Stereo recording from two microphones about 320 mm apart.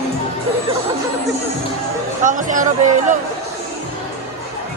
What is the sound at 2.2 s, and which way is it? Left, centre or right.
Speech, right.